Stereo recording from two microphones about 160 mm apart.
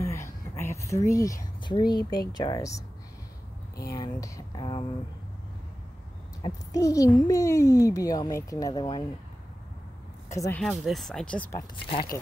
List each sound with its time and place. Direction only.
0.0 s a sound: 15° left (ahead or behind)
2.3 s a child's voice: 25° left (ahead or behind)
3.9 s a child's voice: 25° left (ahead or behind)
6.4 s a child's voice: 20° left (ahead or behind)
10.3 s a child's voice: 20° left (ahead or behind)
10.6 s speech: centre (ahead or behind)